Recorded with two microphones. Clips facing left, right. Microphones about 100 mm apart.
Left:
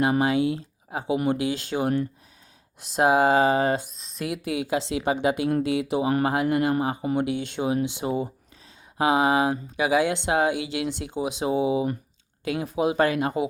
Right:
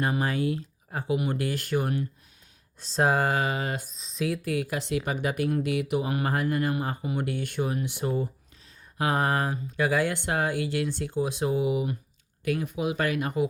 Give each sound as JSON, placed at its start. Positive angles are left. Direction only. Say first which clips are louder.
{"t": 0.2, "sound": "speech", "louder": "left 5 dB", "side_deg": 20}
{"t": 2.8, "sound": "speech", "louder": "left 5 dB", "side_deg": 10}
{"t": 3.9, "sound": "speech", "louder": "right 2 dB", "side_deg": 0}
{"t": 4.3, "sound": "speech", "louder": "left 4 dB", "side_deg": 20}